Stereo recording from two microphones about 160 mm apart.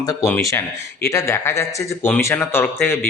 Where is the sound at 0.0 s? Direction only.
25° left (ahead or behind).